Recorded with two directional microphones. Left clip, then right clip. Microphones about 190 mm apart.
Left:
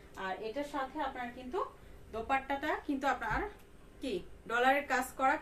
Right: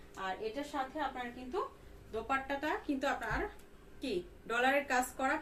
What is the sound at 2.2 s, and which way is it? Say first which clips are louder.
A woman's voice: left 2 dB; 20° left (ahead or behind).